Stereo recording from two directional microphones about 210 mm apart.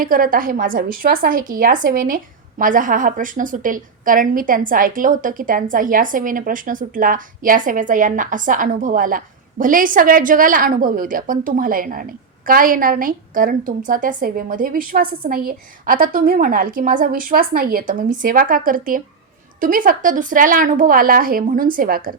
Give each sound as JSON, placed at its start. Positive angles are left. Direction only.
{"t": 0.0, "sound": "a woman's voice", "side_deg": -40}